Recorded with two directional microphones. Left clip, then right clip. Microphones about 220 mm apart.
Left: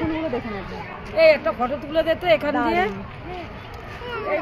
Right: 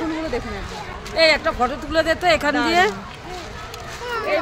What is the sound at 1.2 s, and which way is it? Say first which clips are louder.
Speech: even; 50° right (ahead or behind).